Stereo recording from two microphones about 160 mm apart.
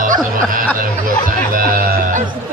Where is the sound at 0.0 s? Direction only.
55° right (ahead or behind).